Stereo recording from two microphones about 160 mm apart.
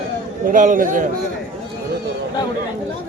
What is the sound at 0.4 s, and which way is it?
Speech, 55° right (ahead or behind).